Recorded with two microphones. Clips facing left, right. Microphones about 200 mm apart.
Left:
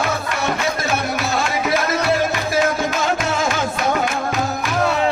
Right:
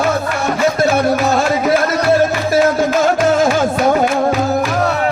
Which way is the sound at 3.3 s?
45° right (ahead or behind).